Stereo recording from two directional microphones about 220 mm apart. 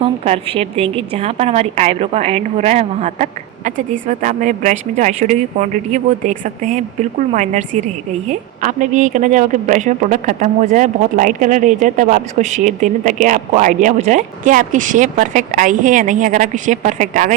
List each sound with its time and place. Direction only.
0.0 s a woman's voice: 25° right (ahead or behind)